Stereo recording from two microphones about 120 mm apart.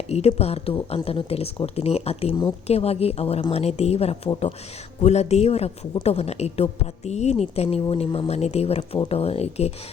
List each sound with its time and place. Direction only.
0.1 s a woman's voice: 60° left (ahead or behind)